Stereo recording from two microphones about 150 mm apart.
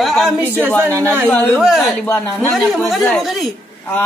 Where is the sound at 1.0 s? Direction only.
15° right (ahead or behind).